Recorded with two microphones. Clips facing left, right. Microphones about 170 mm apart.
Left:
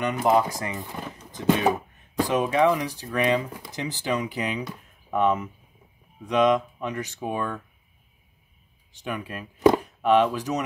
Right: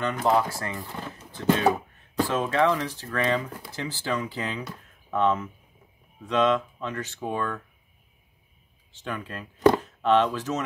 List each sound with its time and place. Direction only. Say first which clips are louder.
0.0 s speech: left 2 dB; 15° left (ahead or behind)
8.9 s speech: left 2 dB; 10° left (ahead or behind)